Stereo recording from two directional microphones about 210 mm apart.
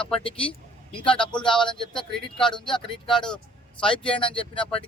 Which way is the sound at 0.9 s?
25° left (ahead or behind).